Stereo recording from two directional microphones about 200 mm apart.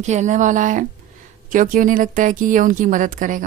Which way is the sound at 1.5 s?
40° right (ahead or behind).